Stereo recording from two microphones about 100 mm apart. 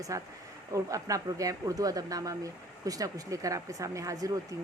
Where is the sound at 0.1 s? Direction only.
30° right (ahead or behind).